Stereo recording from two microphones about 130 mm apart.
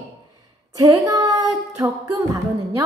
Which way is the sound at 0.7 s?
30° right (ahead or behind).